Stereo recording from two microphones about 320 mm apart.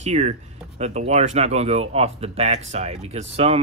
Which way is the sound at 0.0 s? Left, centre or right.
Right.